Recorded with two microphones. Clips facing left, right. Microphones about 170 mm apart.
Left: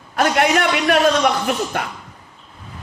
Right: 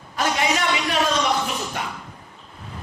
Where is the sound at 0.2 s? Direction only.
60° left (ahead or behind).